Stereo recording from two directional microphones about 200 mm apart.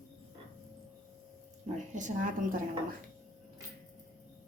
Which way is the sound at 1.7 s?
35° right (ahead or behind).